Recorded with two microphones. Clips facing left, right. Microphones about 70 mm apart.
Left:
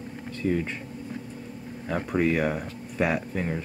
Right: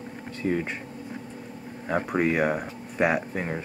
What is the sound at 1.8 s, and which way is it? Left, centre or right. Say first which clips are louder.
Speech: right 1 dB; centre.